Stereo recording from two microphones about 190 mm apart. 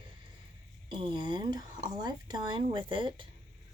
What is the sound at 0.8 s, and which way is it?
A woman's voice, 25° right (ahead or behind).